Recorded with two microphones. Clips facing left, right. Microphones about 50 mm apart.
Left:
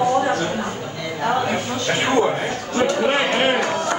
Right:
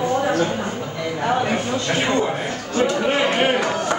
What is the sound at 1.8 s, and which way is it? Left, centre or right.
A man's voice, centre.